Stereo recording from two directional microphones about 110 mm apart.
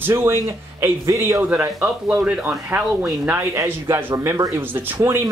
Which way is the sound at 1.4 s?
15° right (ahead or behind).